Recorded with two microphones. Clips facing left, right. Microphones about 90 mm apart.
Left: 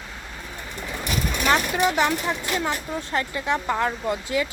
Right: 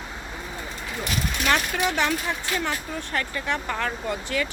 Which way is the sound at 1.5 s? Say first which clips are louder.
Left 3 dB; 20° left (ahead or behind).